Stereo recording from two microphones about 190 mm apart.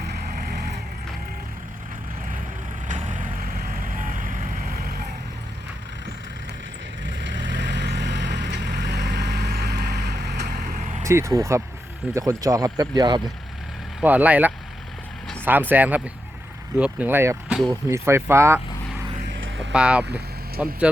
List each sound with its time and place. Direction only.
0.0 s vehicle: 50° right (ahead or behind)
2.9 s vehicle: 45° right (ahead or behind)
7.0 s vehicle: 75° right (ahead or behind); by 11.0 s 40° right (ahead or behind)
11.0 s speech: 15° right (ahead or behind)
14.0 s speech: 10° right (ahead or behind)
19.7 s speech: 5° right (ahead or behind)